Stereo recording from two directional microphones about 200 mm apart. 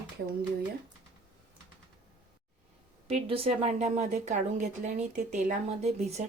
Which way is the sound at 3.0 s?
30° right (ahead or behind).